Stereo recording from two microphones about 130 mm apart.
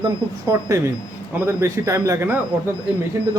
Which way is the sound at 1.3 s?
20° right (ahead or behind).